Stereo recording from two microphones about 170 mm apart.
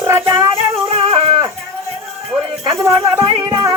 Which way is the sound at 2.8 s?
20° right (ahead or behind).